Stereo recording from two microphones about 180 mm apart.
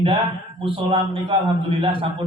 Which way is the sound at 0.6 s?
30° right (ahead or behind).